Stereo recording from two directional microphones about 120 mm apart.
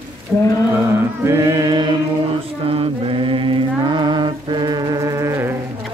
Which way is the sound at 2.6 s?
50° right (ahead or behind).